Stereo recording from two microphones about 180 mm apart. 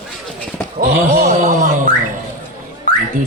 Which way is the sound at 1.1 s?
45° right (ahead or behind).